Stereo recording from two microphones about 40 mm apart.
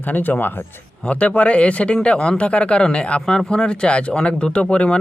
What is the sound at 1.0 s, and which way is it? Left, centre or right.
Speech, left.